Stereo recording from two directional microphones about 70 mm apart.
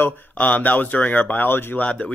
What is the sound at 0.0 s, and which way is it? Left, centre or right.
Speech, left.